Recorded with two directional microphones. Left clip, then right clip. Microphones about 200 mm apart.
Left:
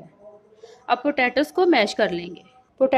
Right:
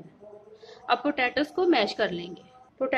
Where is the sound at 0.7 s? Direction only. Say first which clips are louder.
Left 4 dB; 20° left (ahead or behind).